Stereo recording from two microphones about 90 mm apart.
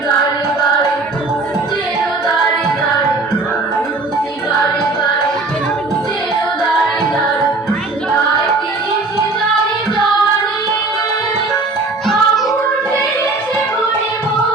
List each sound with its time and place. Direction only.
12.0 s music: centre (ahead or behind)